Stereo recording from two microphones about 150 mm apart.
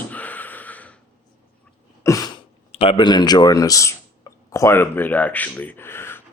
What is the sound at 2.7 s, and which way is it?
Speech, 40° left (ahead or behind).